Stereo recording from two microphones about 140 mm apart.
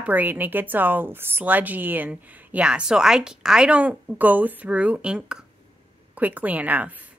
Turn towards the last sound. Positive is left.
turn(degrees=-10)  # may be behind; listen again after turning